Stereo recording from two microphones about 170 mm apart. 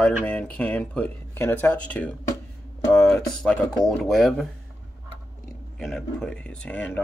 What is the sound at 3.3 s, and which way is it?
Speech, 5° left (ahead or behind).